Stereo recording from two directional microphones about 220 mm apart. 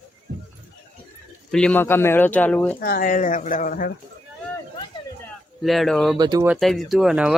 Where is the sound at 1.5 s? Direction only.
5° left (ahead or behind).